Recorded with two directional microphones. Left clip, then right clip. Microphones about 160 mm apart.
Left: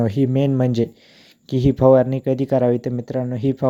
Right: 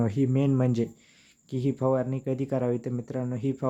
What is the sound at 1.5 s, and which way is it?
Speech, 45° left (ahead or behind).